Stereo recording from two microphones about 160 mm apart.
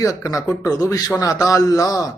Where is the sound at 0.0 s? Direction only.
20° left (ahead or behind).